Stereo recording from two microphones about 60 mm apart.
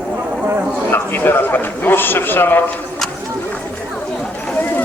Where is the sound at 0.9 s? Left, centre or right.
Left.